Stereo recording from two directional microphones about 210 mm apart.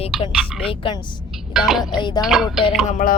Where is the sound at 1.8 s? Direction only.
20° left (ahead or behind).